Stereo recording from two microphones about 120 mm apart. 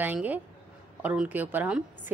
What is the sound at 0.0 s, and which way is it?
A woman's voice, 15° right (ahead or behind).